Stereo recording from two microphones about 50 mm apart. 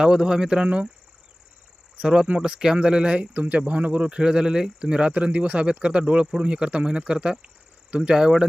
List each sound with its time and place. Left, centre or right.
0.0 s speech: centre
2.2 s speech: centre
3.3 s speech: right; by 8.4 s centre